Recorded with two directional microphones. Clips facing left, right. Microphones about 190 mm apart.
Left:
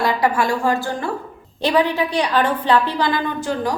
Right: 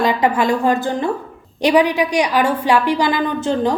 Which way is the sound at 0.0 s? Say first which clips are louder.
Right 2 dB; 20° right (ahead or behind).